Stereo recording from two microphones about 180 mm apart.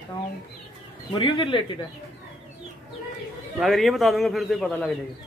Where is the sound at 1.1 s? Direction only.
25° left (ahead or behind).